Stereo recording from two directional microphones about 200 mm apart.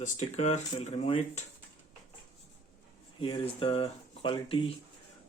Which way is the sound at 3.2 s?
25° left (ahead or behind).